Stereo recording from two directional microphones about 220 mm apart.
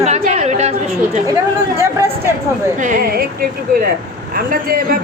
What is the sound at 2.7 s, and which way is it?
A woman's voice, 35° right (ahead or behind).